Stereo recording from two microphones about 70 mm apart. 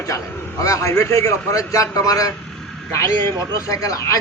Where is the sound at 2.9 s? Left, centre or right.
Left.